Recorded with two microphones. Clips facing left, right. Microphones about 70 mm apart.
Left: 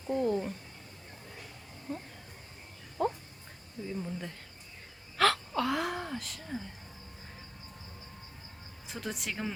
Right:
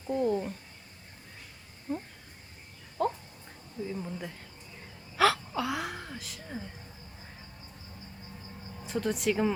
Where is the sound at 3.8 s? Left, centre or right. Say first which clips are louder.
Left 1 dB; centre.